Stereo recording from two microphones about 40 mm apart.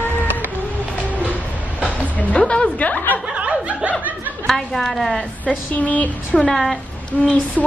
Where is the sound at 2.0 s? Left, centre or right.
Left.